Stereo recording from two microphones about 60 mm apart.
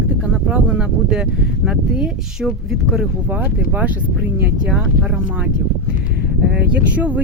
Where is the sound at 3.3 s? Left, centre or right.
Right.